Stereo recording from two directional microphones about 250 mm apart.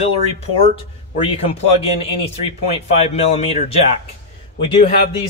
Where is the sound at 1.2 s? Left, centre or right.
Left.